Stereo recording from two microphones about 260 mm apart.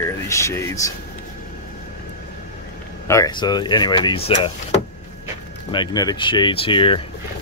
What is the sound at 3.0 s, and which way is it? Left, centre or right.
Speech, centre.